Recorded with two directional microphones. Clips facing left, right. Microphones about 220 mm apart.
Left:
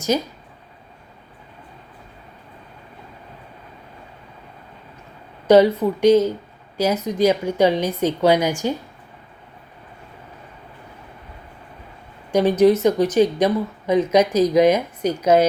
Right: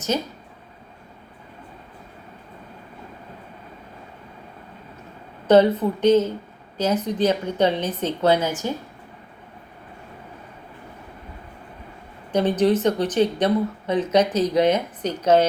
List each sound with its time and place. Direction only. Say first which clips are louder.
5.5 s speech: left 2 dB; 10° left (ahead or behind)
12.3 s speech: left 4 dB; 10° left (ahead or behind)